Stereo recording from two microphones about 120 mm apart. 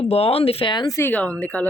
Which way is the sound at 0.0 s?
55° left (ahead or behind).